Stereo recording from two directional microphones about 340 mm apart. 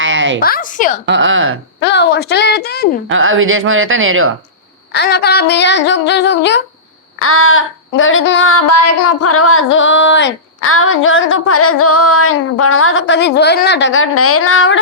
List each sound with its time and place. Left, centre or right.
0.0 s a sound: right
0.3 s a woman's voice: left
1.0 s speech: right
1.8 s a woman's voice: left
3.1 s speech: right
4.9 s speech: left
8.6 s speech: left